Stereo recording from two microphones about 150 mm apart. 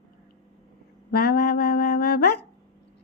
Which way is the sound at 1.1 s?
90° left.